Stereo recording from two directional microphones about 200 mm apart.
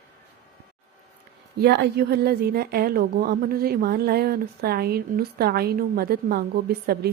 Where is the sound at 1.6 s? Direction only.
55° right (ahead or behind).